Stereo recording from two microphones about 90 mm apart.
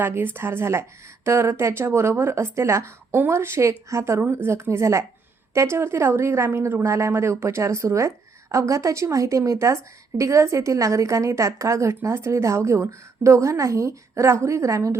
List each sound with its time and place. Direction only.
0.0 s a woman's voice: 25° right (ahead or behind)